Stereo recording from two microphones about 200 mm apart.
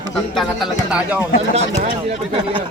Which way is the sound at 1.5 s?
30° right (ahead or behind).